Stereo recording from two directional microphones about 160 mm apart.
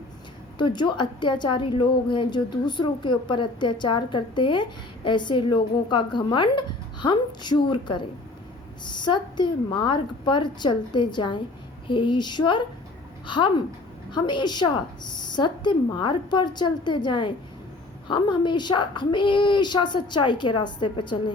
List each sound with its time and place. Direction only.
0.6 s a woman's voice: 30° left (ahead or behind)